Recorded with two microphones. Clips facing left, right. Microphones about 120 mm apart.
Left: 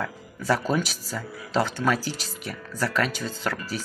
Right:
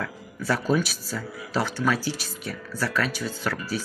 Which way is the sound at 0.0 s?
15° left (ahead or behind).